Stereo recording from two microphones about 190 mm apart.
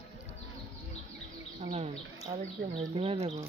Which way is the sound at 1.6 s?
30° right (ahead or behind).